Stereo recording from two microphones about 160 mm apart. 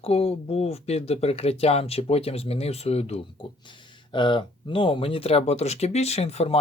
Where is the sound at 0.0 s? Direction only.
40° left (ahead or behind).